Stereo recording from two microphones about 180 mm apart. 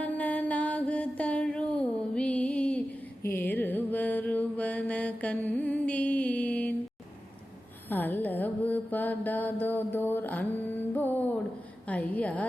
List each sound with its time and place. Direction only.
0.0 s music: 10° left (ahead or behind)
3.2 s mantra: 10° left (ahead or behind)
7.9 s mantra: 10° left (ahead or behind)
11.9 s a woman's voice: 10° left (ahead or behind)